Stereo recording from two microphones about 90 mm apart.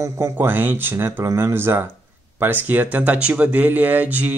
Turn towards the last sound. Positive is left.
turn(degrees=-20)  # may be behind; listen again after turning